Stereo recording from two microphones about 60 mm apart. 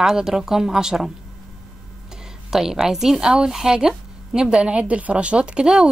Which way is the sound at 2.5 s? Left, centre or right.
Centre.